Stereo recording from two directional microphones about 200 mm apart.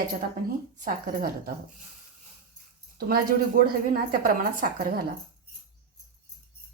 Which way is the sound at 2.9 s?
45° right (ahead or behind).